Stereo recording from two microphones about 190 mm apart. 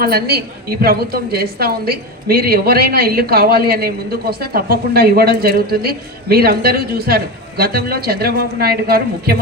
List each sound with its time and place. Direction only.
0.0 s a woman's voice: 55° right (ahead or behind)